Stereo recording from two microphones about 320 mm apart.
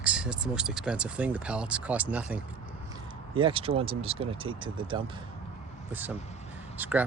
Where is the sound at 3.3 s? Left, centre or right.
Centre.